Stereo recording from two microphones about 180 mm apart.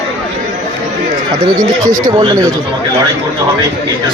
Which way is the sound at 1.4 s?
20° right (ahead or behind).